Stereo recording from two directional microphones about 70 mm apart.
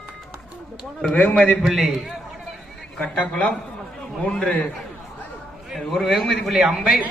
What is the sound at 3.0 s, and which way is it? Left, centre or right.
A man's voice, centre.